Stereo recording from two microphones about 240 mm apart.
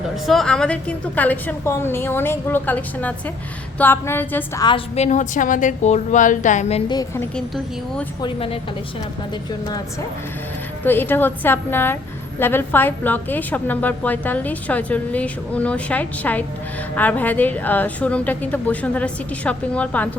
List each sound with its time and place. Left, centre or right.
0.3 s a woman's voice: centre
8.2 s a woman's voice: left
10.8 s a woman's voice: centre